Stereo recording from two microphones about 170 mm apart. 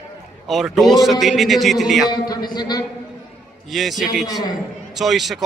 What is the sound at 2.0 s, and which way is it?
Speech, 25° left (ahead or behind).